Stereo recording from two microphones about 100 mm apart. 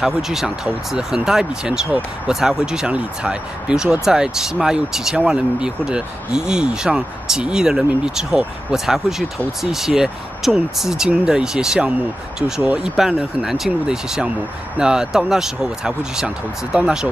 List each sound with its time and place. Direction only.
0.0 s speech: 5° right (ahead or behind)